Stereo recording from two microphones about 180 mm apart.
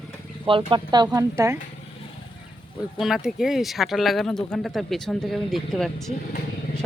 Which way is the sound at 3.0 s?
Centre (ahead or behind).